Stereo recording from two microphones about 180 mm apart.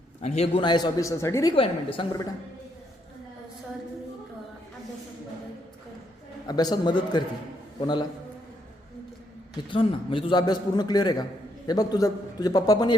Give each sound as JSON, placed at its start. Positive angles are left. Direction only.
{"t": 0.2, "sound": "a man's voice", "side_deg": 35}
{"t": 1.5, "sound": "a woman's voice", "side_deg": 30}
{"t": 6.5, "sound": "a man's voice", "side_deg": 20}
{"t": 9.6, "sound": "a man's voice", "side_deg": 30}